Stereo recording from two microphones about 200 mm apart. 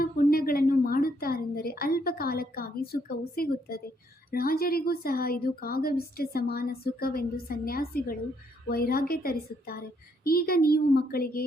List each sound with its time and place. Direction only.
0.0 s a woman's voice: 50° left (ahead or behind)